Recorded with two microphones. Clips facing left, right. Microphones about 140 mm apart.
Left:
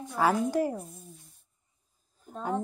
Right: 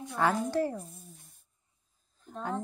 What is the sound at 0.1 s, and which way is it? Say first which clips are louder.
Child singing: left 2 dB; 10° left (ahead or behind).